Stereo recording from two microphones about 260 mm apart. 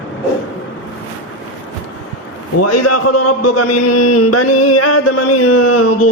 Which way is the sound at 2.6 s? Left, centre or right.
Left.